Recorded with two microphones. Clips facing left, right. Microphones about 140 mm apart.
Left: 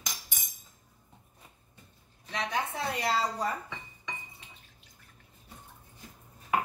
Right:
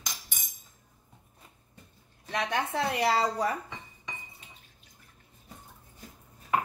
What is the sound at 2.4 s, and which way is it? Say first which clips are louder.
Speech: right 3 dB; 70° right (ahead or behind).